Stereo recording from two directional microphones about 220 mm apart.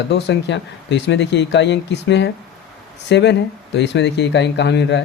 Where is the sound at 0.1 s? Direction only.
50° left (ahead or behind).